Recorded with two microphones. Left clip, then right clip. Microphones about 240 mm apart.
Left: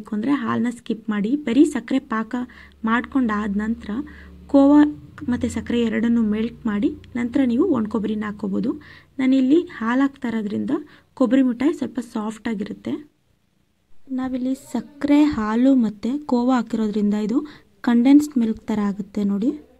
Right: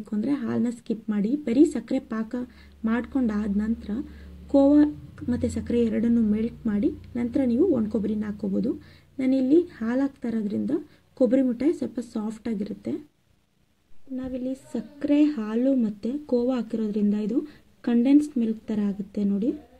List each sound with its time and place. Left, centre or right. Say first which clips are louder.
0.0 s speech: left 5 dB; centre
14.1 s a woman's voice: left 6 dB; left